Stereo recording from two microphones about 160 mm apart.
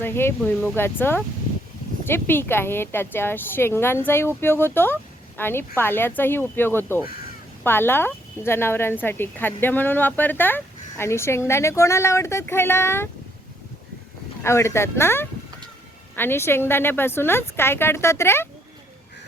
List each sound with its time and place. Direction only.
0.0 s speech: 15° left (ahead or behind)
14.4 s speech: 15° left (ahead or behind)